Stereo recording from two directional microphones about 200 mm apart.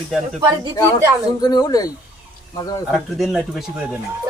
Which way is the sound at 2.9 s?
Centre (ahead or behind).